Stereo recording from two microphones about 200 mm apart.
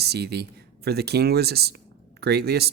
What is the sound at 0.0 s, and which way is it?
Speech, 55° right (ahead or behind).